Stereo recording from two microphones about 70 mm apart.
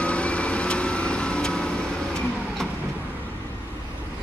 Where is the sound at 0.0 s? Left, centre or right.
Centre.